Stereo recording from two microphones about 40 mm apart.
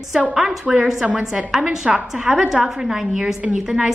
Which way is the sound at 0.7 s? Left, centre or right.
Centre.